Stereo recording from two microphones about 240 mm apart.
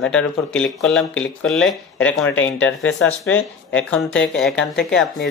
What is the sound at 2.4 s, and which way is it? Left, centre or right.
Speech, left.